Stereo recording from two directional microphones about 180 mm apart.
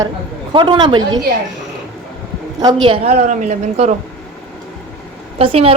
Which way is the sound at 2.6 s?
30° right (ahead or behind).